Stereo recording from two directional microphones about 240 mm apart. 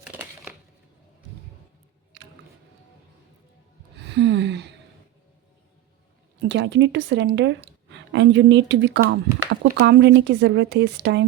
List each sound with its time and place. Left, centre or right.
0.0 s crushing: centre
2.1 s music: right
4.0 s a sound: right
6.4 s speech: right